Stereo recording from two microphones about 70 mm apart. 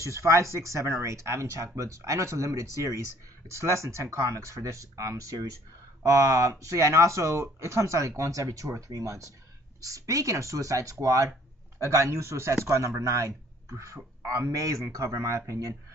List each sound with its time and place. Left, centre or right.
0.0 s speech: right